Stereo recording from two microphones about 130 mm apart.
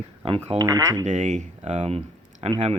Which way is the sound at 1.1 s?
65° right (ahead or behind).